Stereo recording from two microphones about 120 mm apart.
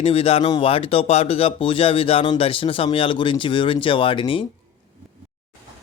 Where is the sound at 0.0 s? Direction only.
55° left (ahead or behind).